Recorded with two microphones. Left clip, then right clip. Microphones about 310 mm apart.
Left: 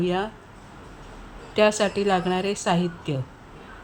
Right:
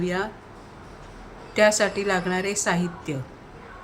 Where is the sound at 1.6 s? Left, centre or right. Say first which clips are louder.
Right 1 dB; left.